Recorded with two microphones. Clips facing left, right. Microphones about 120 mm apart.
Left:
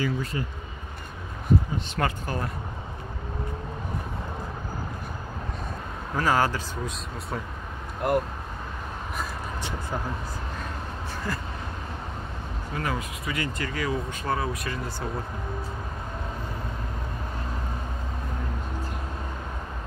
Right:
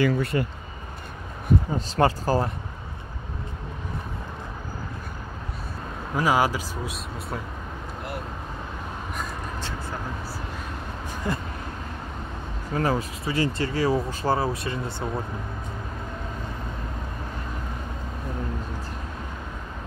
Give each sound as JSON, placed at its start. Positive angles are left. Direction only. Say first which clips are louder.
{"t": 0.0, "sound": "speech", "louder": "right 6 dB", "side_deg": -65}
{"t": 2.0, "sound": "speech", "louder": "right 8 dB", "side_deg": -30}
{"t": 6.1, "sound": "speech", "louder": "right 2 dB", "side_deg": -10}
{"t": 8.0, "sound": "speech", "louder": "left 12 dB", "side_deg": 45}
{"t": 9.6, "sound": "vehicle", "louder": "even", "side_deg": 15}
{"t": 11.3, "sound": "speech", "louder": "right 4 dB", "side_deg": -20}
{"t": 12.7, "sound": "speech", "louder": "right 6 dB", "side_deg": -35}